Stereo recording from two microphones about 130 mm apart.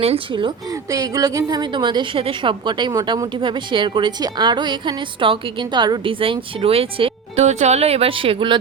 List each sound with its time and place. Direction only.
0.0 s a woman's voice: 45° right (ahead or behind)
0.9 s a woman's voice: 25° right (ahead or behind); by 7.4 s 45° right (ahead or behind)
7.4 s speech: 60° right (ahead or behind); by 8.5 s 40° right (ahead or behind)